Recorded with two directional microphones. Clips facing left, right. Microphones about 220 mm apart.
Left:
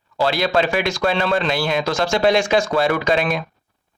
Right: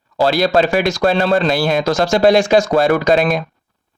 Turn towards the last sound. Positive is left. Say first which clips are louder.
# right 5 dB
turn(degrees=-40)  # may be behind; listen again after turning